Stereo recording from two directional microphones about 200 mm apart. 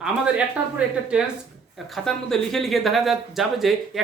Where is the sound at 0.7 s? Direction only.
5° right (ahead or behind).